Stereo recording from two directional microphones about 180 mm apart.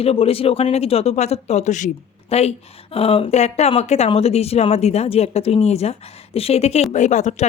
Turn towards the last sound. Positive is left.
turn(degrees=40)  # may be behind; listen again after turning